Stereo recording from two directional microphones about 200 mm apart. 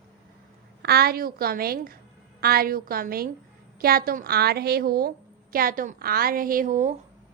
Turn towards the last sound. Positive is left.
turn(degrees=-40)  # may be behind; listen again after turning